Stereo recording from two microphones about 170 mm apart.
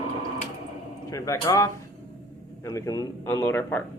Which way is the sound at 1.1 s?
20° left (ahead or behind).